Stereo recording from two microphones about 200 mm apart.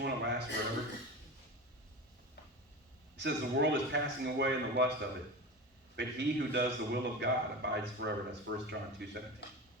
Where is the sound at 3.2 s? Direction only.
60° right (ahead or behind).